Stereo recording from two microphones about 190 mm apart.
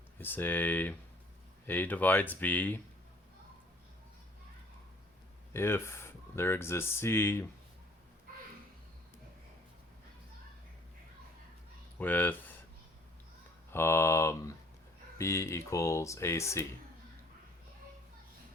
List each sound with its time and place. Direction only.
0.2 s speech: 10° left (ahead or behind)
5.5 s speech: 10° left (ahead or behind)
11.9 s speech: 10° left (ahead or behind)
13.7 s speech: 10° left (ahead or behind)